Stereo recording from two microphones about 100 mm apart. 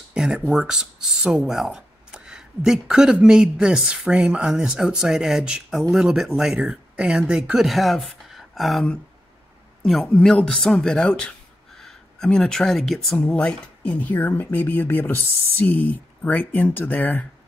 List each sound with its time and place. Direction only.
0.1 s a sound: 10° right (ahead or behind)
0.5 s speech: 5° right (ahead or behind)
9.8 s a man's voice: 5° left (ahead or behind)